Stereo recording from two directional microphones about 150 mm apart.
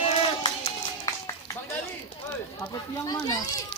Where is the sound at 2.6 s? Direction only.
20° left (ahead or behind).